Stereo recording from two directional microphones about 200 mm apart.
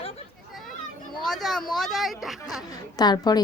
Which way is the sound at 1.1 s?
Centre (ahead or behind).